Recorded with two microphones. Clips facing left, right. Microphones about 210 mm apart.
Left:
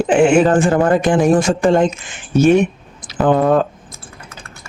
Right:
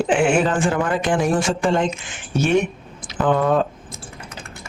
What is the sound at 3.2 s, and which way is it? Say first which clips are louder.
Speech: left 5 dB; 40° left (ahead or behind).